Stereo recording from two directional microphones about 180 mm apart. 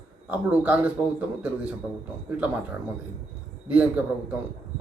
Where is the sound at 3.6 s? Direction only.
10° right (ahead or behind).